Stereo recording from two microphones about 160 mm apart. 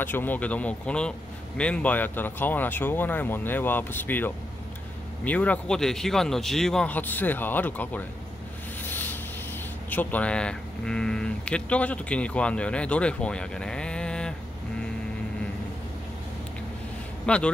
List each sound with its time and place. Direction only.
0.0 s speech: 10° left (ahead or behind)
8.8 s vehicle: 10° left (ahead or behind)
9.8 s speech: 10° left (ahead or behind)
17.3 s speech: 5° left (ahead or behind)